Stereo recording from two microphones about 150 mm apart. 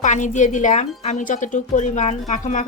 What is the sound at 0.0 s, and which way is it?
A woman's voice, 55° left (ahead or behind).